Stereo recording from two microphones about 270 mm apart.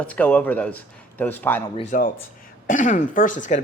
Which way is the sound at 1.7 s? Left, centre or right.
Left.